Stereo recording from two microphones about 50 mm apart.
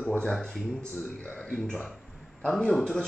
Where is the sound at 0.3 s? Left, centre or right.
Centre.